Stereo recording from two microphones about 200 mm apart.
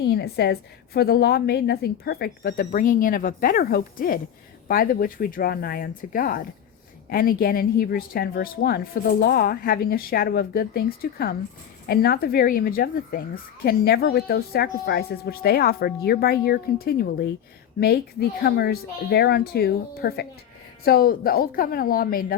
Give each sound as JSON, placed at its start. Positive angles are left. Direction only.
{"t": 0.0, "sound": "speech", "side_deg": 55}